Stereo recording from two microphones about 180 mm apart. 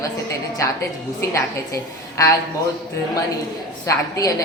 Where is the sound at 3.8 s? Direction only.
20° left (ahead or behind).